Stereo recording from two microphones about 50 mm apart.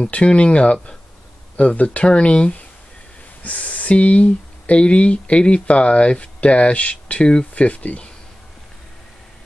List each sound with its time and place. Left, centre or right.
0.0 s speech: left